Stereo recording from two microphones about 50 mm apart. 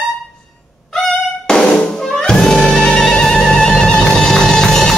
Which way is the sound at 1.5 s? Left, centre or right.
Centre.